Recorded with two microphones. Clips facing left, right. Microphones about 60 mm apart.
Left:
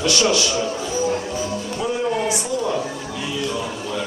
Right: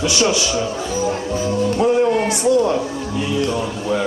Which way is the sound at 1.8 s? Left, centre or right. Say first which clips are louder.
Right 6 dB; right.